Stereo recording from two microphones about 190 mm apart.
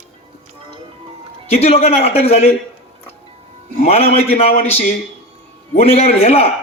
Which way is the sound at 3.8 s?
35° left (ahead or behind).